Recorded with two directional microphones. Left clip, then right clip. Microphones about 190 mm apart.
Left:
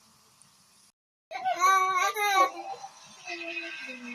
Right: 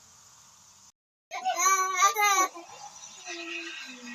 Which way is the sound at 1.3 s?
15° right (ahead or behind).